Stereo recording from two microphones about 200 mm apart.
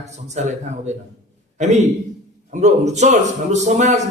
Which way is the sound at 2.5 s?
35° right (ahead or behind).